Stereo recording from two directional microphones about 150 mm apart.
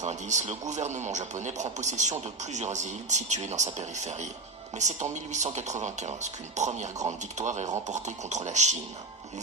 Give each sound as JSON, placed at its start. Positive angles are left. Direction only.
{"t": 0.0, "sound": "a man's voice", "side_deg": -50}